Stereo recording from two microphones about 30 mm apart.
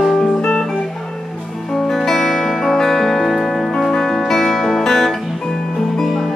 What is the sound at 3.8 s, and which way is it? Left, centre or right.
Music, centre.